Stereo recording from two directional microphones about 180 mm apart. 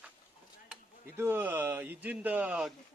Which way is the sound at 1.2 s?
10° right (ahead or behind).